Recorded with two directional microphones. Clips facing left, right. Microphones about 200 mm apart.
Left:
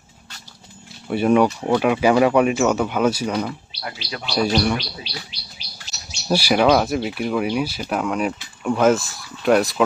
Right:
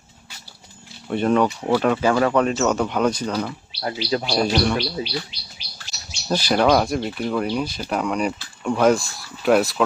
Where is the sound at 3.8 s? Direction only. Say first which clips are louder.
Right 13 dB; 30° right (ahead or behind).